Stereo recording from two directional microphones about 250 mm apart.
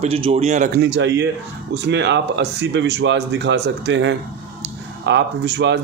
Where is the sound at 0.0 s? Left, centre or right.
Right.